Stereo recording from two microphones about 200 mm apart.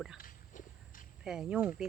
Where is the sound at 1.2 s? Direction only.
5° right (ahead or behind).